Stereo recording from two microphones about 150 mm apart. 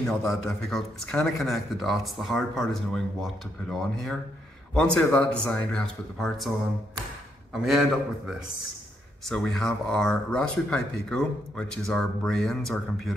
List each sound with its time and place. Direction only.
0.0 s speech: 5° left (ahead or behind)
7.5 s speech: 5° right (ahead or behind)
9.2 s speech: 5° left (ahead or behind)